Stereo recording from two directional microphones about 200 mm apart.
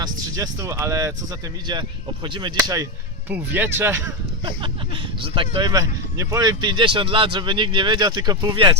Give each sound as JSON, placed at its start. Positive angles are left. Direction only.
{"t": 0.0, "sound": "speech", "side_deg": -15}
{"t": 2.2, "sound": "speech", "side_deg": -25}
{"t": 3.2, "sound": "speech", "side_deg": -10}
{"t": 5.2, "sound": "speech", "side_deg": -25}